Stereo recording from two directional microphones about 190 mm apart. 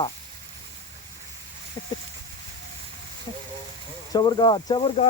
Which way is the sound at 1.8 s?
25° left (ahead or behind).